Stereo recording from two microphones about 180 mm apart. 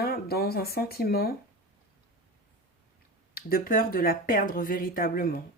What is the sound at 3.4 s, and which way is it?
Speech, 55° left (ahead or behind).